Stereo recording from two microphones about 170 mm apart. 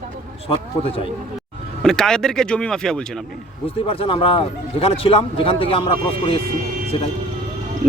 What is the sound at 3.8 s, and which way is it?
A man's voice, 35° left (ahead or behind).